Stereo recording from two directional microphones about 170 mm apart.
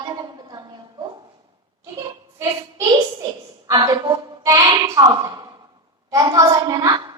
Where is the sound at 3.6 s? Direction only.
20° right (ahead or behind).